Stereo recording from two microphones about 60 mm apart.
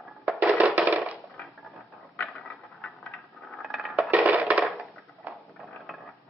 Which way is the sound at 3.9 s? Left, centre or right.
Right.